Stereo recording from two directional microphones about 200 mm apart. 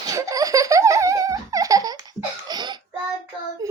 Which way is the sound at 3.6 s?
15° right (ahead or behind).